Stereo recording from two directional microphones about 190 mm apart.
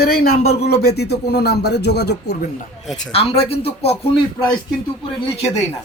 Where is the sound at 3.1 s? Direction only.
30° left (ahead or behind).